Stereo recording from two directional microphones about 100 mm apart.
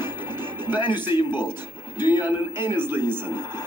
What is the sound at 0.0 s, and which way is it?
Music, 20° right (ahead or behind).